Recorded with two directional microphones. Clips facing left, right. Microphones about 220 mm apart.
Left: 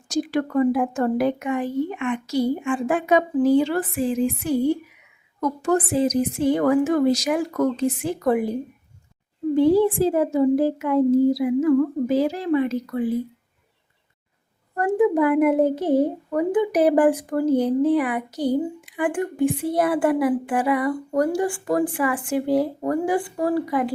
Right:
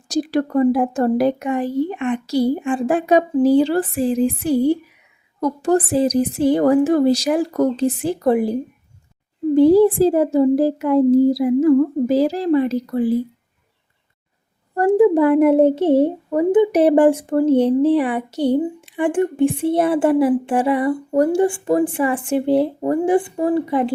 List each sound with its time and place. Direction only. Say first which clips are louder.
0.1 s a woman's voice: right 4 dB; 35° right (ahead or behind)
9.6 s a woman's voice: right 5 dB; 35° right (ahead or behind)
14.8 s speech: right 5 dB; 30° right (ahead or behind)